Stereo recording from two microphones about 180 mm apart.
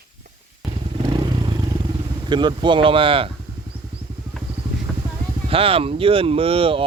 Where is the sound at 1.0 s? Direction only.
20° right (ahead or behind).